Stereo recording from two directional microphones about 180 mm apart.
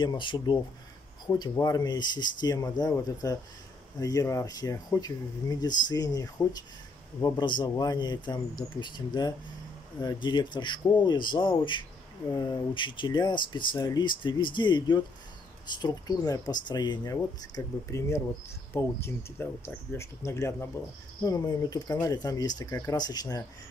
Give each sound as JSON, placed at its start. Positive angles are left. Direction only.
{"t": 0.0, "sound": "speech", "side_deg": 25}